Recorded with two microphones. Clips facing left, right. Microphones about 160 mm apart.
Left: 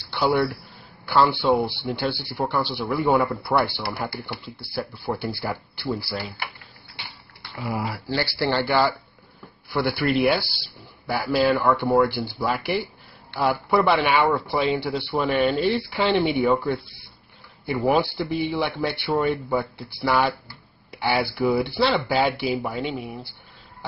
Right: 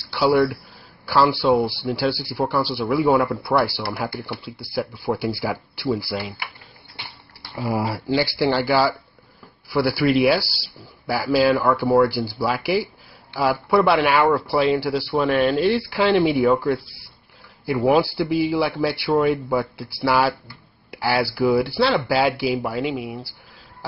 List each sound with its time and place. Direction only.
0.1 s speech: 5° right (ahead or behind)
4.6 s speech: 10° right (ahead or behind)
7.6 s speech: 35° right (ahead or behind)
8.1 s speech: 15° right (ahead or behind)